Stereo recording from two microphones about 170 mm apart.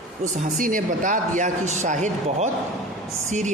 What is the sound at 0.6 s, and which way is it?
Speech, 50° right (ahead or behind).